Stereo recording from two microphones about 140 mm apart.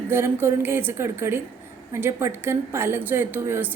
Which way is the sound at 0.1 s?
15° right (ahead or behind).